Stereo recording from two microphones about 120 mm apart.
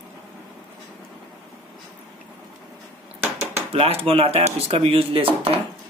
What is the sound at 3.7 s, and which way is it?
Speech, 55° right (ahead or behind).